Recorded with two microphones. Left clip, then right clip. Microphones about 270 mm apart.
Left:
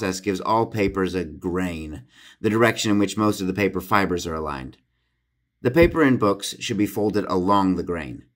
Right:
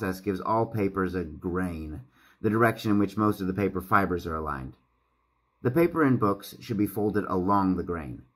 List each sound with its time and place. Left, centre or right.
0.0 s speech: left
5.7 s a man's voice: left